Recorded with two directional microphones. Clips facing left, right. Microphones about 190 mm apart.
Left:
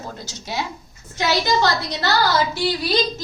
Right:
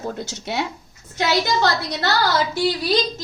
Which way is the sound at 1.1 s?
55° right (ahead or behind).